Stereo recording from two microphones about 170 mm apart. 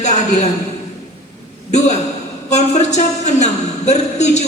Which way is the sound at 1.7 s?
40° left (ahead or behind).